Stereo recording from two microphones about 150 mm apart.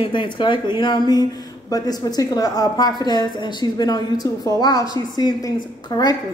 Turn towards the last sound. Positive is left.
turn(degrees=25)  # may be behind; listen again after turning